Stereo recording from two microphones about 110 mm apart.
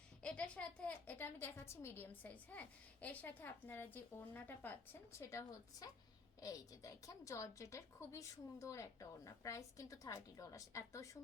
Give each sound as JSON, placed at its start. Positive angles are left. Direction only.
{"t": 0.2, "sound": "a woman's voice", "side_deg": 10}
{"t": 5.1, "sound": "a woman's voice", "side_deg": 25}